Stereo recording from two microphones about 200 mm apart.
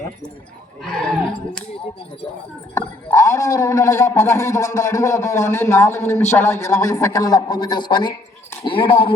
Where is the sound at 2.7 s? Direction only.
15° left (ahead or behind).